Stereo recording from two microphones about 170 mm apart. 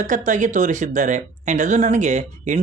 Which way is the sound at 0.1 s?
50° right (ahead or behind).